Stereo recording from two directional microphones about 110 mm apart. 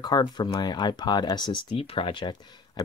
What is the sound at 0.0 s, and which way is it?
Speech, 40° left (ahead or behind).